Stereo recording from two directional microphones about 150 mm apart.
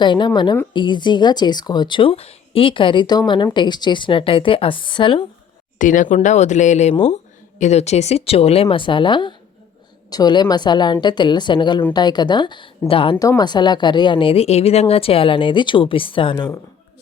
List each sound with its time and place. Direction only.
0.0 s a woman's voice: 30° left (ahead or behind)
5.8 s a woman's voice: 60° left (ahead or behind); by 13.1 s 35° left (ahead or behind)
13.1 s speech: 25° left (ahead or behind)